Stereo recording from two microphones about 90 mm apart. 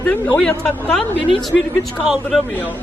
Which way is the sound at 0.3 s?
10° left (ahead or behind).